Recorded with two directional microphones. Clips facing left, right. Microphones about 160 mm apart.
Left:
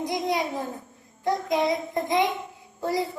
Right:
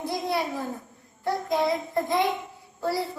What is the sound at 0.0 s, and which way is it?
Child singing, 15° left (ahead or behind).